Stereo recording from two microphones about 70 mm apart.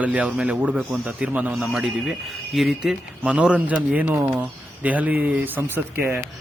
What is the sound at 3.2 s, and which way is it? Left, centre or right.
A man's voice, centre.